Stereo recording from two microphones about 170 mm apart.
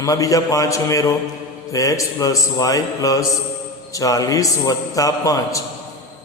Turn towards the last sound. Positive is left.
turn(degrees=20)  # may be behind; listen again after turning